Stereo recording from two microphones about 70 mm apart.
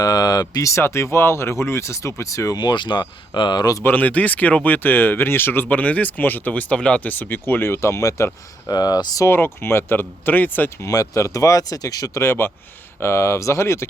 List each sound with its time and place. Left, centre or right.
0.0 s a sound: left
0.7 s speech: left
2.6 s speech: left
3.8 s speech: left
5.6 s speech: left
7.1 s speech: left
8.7 s speech: left
9.2 s speech: left
10.8 s speech: left
12.2 s speech: left